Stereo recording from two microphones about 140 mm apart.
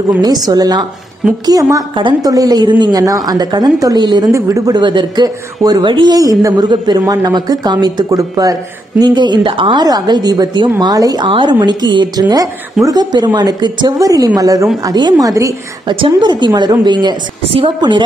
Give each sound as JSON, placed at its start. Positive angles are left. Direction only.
{"t": 0.2, "sound": "a woman's voice", "side_deg": -30}